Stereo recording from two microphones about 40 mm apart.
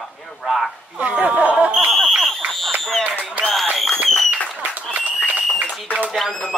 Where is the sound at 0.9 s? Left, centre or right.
Right.